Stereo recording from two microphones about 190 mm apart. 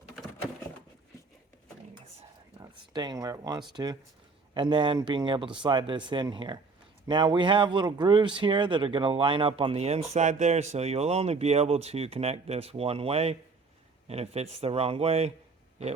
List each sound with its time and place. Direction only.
2.6 s speech: 20° right (ahead or behind)